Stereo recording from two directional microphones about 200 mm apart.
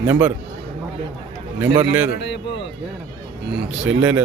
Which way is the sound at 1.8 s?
10° right (ahead or behind).